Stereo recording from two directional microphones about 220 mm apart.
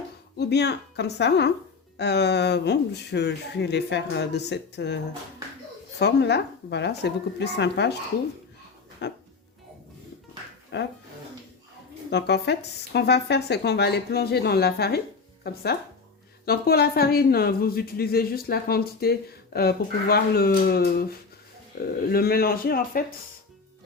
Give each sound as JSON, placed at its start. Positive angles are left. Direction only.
{"t": 0.3, "sound": "speech", "side_deg": 50}
{"t": 6.0, "sound": "speech", "side_deg": 50}
{"t": 9.0, "sound": "speech", "side_deg": 50}
{"t": 10.7, "sound": "speech", "side_deg": 50}
{"t": 12.1, "sound": "speech", "side_deg": 50}